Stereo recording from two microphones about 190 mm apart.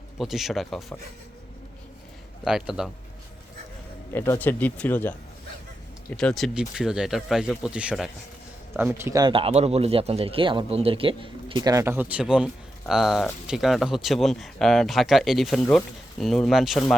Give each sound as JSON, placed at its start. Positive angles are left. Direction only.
{"t": 0.2, "sound": "speech", "side_deg": 0}
{"t": 2.4, "sound": "speech", "side_deg": -5}
{"t": 4.1, "sound": "speech", "side_deg": 10}
{"t": 6.1, "sound": "speech", "side_deg": 0}
{"t": 9.3, "sound": "speech", "side_deg": -30}